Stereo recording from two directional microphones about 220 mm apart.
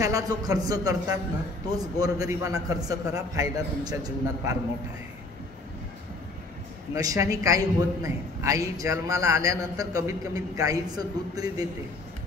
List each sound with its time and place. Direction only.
0.0 s a man's voice: 15° right (ahead or behind)
7.0 s a man's voice: 15° right (ahead or behind)